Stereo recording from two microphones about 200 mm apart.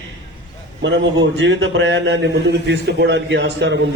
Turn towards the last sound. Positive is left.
turn(degrees=-60)  # may be behind; listen again after turning